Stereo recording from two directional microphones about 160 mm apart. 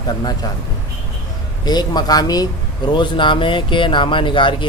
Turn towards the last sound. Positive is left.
turn(degrees=30)  # may be behind; listen again after turning